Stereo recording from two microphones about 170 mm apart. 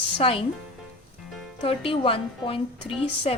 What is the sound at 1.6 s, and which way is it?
Speech, 35° left (ahead or behind).